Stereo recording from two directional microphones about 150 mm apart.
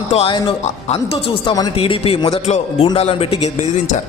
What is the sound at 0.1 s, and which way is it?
A man's voice, 35° left (ahead or behind).